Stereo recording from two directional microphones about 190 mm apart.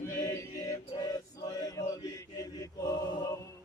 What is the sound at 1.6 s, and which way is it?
Chant, 20° left (ahead or behind).